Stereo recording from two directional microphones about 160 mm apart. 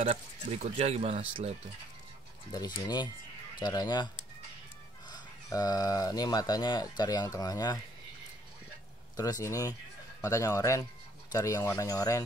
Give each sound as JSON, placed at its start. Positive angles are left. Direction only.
{"t": 0.0, "sound": "speech", "side_deg": -40}
{"t": 2.5, "sound": "speech", "side_deg": 25}
{"t": 9.1, "sound": "speech", "side_deg": 20}